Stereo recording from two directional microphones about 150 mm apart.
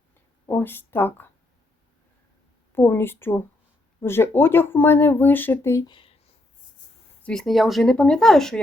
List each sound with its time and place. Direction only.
0.4 s speech: 15° left (ahead or behind)
2.7 s speech: 15° left (ahead or behind)
5.9 s a sound: 35° left (ahead or behind)
7.2 s speech: 5° left (ahead or behind)